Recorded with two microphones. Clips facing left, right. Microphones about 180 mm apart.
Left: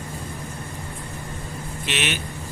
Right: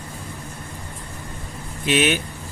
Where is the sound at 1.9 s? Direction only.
45° right (ahead or behind).